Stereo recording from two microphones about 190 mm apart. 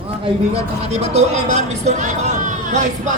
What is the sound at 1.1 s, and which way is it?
Speech, 35° right (ahead or behind).